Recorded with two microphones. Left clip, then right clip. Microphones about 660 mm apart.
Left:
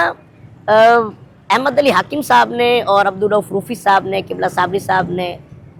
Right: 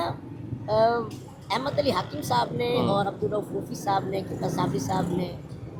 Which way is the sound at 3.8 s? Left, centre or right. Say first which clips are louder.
Left 13 dB; left.